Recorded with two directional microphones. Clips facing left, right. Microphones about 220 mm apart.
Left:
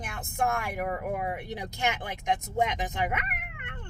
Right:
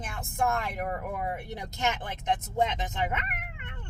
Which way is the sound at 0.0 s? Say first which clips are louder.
Even; 15° left (ahead or behind).